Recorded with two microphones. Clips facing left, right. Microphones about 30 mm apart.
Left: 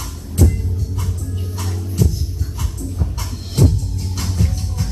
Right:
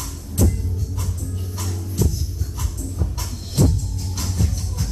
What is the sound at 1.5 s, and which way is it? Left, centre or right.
Music, left.